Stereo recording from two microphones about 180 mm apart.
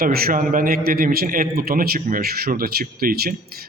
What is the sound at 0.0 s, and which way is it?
A man's voice, 55° right (ahead or behind).